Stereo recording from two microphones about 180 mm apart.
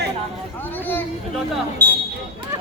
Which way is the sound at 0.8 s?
10° left (ahead or behind).